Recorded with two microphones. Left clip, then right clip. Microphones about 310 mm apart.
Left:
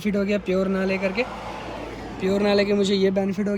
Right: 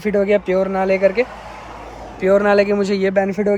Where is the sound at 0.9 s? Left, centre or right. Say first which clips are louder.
Right 9 dB; centre.